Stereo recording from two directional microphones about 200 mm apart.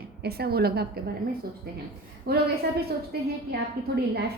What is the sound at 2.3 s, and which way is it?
Speech, 55° right (ahead or behind).